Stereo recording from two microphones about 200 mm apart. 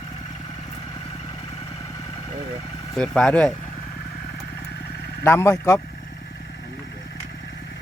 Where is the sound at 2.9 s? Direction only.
5° left (ahead or behind).